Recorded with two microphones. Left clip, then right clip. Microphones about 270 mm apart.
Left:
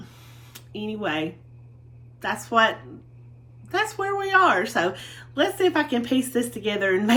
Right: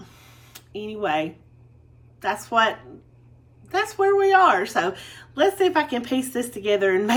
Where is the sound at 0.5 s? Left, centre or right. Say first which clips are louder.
Even; centre.